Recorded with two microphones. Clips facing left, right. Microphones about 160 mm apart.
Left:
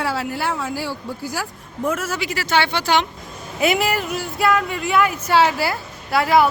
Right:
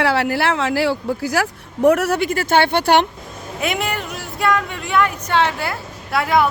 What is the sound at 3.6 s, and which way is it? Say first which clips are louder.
Speech: left 4 dB; 5° left (ahead or behind).